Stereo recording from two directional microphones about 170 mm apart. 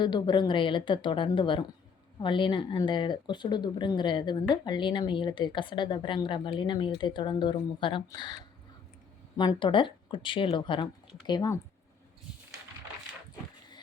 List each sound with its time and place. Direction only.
0.0 s speech: 25° left (ahead or behind)
9.4 s speech: 25° left (ahead or behind)